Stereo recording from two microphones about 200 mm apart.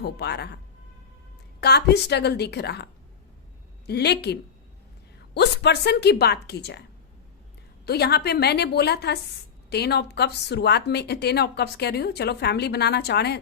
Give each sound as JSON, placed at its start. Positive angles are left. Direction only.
{"t": 0.0, "sound": "speech", "side_deg": 55}
{"t": 1.6, "sound": "speech", "side_deg": 55}
{"t": 3.8, "sound": "speech", "side_deg": 55}
{"t": 7.9, "sound": "speech", "side_deg": 55}